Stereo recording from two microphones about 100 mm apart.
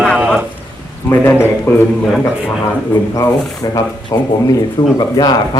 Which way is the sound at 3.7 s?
40° left (ahead or behind).